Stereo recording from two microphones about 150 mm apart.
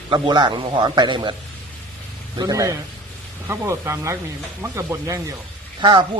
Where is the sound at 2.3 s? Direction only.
25° right (ahead or behind).